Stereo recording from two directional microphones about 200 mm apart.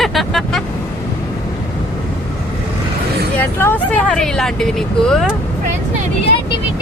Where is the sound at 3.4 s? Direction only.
10° left (ahead or behind).